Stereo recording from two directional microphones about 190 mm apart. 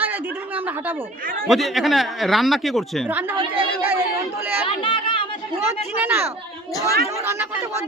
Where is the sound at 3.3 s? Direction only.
25° right (ahead or behind).